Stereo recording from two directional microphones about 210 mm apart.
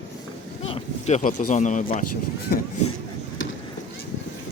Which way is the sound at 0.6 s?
30° left (ahead or behind).